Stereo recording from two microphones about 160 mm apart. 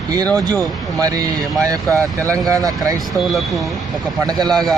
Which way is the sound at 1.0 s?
20° right (ahead or behind).